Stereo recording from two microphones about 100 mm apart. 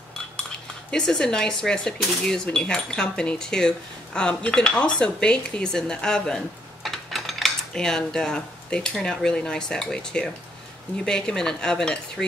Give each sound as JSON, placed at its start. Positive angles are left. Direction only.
{"t": 0.9, "sound": "speech", "side_deg": 5}